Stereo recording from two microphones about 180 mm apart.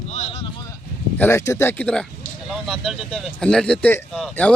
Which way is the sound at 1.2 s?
15° left (ahead or behind).